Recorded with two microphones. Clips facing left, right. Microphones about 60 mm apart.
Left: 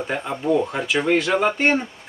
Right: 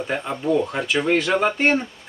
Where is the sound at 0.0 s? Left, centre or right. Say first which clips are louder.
Even; centre.